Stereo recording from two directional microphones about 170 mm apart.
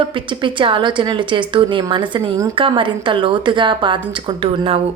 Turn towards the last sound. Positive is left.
turn(degrees=-35)  # may be behind; listen again after turning